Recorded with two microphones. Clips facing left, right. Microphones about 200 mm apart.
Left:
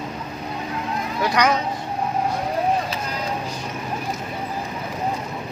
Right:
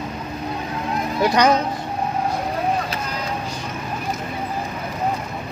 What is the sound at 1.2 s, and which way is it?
Speech, 25° right (ahead or behind).